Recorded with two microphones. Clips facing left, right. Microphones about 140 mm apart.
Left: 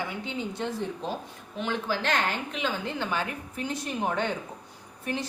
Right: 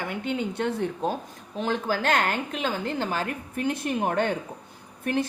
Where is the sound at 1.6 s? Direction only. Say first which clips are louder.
Right 3 dB; 45° right (ahead or behind).